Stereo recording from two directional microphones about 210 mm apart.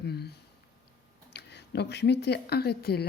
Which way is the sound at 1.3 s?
55° left (ahead or behind).